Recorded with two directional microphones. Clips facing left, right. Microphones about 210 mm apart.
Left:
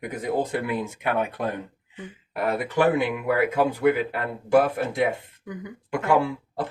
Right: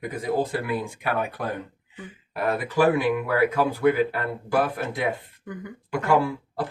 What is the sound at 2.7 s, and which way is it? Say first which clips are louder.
Speech: right 2 dB; 20° left (ahead or behind).